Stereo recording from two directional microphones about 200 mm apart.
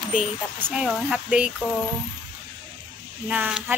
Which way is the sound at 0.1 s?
10° right (ahead or behind).